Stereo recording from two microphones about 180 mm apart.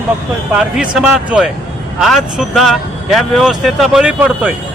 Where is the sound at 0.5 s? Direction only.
5° right (ahead or behind).